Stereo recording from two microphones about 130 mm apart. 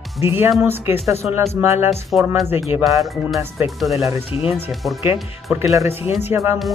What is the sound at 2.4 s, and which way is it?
Speech, 15° right (ahead or behind).